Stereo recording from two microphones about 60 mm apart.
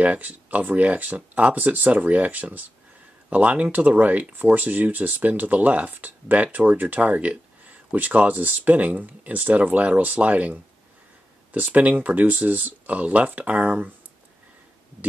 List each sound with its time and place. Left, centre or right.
0.0 s speech: right